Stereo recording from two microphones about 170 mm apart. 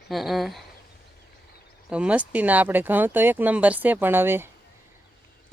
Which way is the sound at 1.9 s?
5° right (ahead or behind).